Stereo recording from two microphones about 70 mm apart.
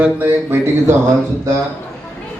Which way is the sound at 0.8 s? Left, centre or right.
Right.